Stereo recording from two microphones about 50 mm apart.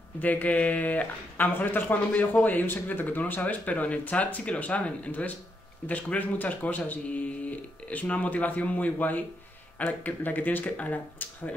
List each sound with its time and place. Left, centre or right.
0.2 s speech: left
3.6 s speech: left